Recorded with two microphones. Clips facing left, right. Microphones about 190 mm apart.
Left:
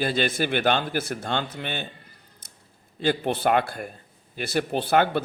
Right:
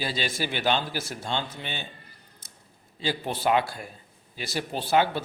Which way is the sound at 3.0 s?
55° left (ahead or behind).